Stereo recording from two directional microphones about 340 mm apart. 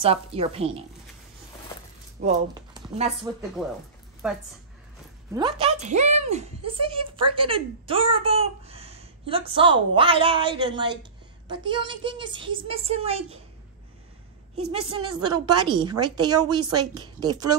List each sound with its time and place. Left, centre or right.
0.0 s a woman's voice: centre
2.2 s speech: centre
3.6 s a woman's voice: centre
5.3 s a woman's voice: centre
14.7 s a woman's voice: centre
15.0 s a woman's voice: right
16.0 s a woman's voice: centre
17.3 s a woman's voice: right